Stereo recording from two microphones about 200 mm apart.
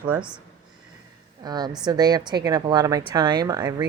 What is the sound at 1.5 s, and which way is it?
A woman's voice, 20° right (ahead or behind).